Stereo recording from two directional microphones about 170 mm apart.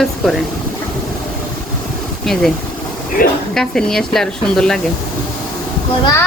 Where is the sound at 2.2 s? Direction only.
Centre (ahead or behind).